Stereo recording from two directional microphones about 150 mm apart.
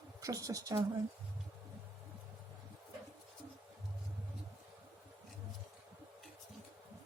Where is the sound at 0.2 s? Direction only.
20° right (ahead or behind).